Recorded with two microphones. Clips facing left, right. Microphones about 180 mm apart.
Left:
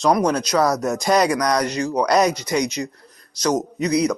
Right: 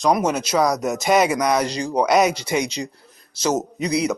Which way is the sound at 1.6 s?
30° right (ahead or behind).